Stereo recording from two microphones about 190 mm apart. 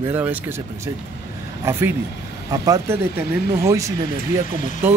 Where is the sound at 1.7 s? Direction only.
15° right (ahead or behind).